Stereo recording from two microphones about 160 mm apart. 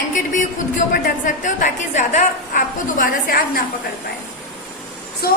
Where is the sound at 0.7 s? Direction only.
55° left (ahead or behind).